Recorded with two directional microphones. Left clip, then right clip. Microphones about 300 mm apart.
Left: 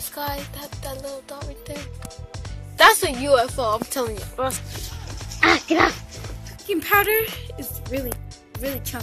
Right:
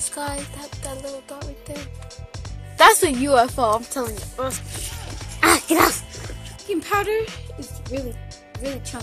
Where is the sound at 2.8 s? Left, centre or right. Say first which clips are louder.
Right 1 dB; centre.